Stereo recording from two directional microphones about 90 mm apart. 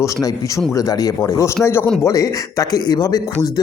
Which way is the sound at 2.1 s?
40° left (ahead or behind).